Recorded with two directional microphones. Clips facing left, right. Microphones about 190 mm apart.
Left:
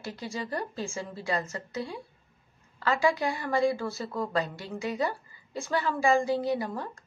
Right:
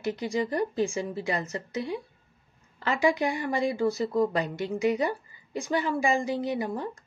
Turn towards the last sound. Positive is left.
turn(degrees=-20)  # may be behind; listen again after turning